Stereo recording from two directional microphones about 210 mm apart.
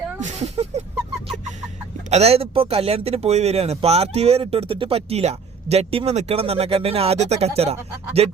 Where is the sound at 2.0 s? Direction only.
30° right (ahead or behind).